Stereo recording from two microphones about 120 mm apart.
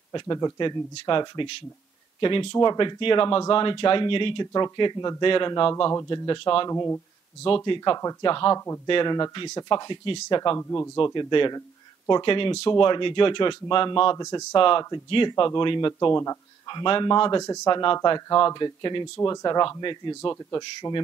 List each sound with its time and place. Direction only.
0.1 s speech: 35° left (ahead or behind)
2.5 s speech: 35° left (ahead or behind)
5.9 s speech: 30° left (ahead or behind)
6.7 s speech: 25° left (ahead or behind)
7.4 s speech: 45° left (ahead or behind)
10.6 s speech: 25° left (ahead or behind)
11.1 s speech: 40° left (ahead or behind)
14.1 s speech: 35° left (ahead or behind)
16.2 s speech: 30° left (ahead or behind)
16.8 s speech: 40° left (ahead or behind)